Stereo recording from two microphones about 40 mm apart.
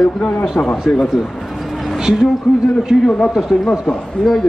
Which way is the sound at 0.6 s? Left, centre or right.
Left.